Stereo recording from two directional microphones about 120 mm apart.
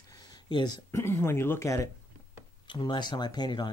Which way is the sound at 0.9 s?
20° left (ahead or behind).